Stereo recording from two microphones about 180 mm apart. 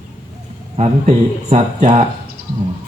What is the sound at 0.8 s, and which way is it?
A man's voice, 35° right (ahead or behind).